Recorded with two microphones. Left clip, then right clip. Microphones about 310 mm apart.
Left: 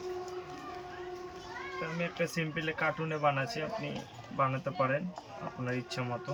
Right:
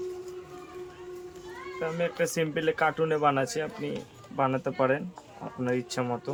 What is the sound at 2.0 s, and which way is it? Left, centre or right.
Speech, centre.